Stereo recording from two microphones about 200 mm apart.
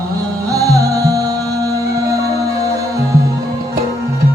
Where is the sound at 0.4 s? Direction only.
15° right (ahead or behind).